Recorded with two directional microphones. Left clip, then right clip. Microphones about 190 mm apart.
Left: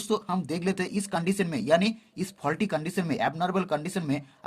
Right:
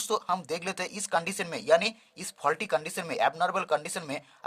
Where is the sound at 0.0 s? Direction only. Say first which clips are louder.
Even; 25° right (ahead or behind).